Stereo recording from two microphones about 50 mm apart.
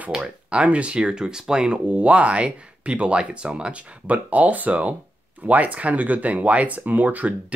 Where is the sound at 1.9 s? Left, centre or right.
Right.